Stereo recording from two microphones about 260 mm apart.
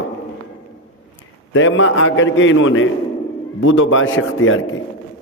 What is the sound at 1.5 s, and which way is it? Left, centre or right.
A man's voice, left.